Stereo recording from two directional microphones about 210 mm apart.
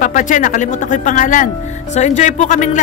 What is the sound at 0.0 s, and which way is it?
Speech, 40° left (ahead or behind).